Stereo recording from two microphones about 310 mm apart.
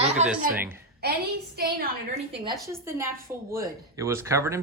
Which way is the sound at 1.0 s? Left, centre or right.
Right.